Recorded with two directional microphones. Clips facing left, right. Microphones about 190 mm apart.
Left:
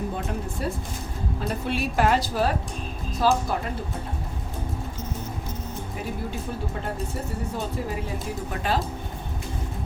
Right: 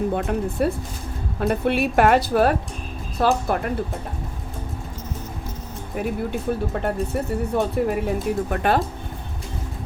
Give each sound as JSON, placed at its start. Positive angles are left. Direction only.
{"t": 0.1, "sound": "speech", "side_deg": -60}
{"t": 6.8, "sound": "speech", "side_deg": -60}